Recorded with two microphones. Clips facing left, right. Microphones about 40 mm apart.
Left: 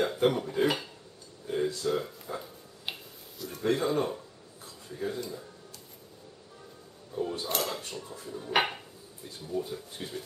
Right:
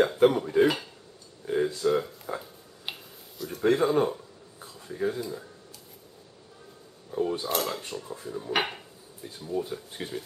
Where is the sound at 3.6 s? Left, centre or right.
Right.